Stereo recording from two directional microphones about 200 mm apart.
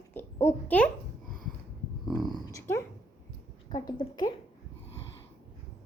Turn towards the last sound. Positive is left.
turn(degrees=20)  # may be behind; listen again after turning